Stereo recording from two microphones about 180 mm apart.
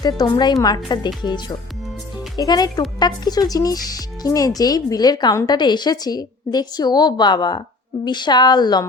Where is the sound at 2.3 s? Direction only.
20° left (ahead or behind).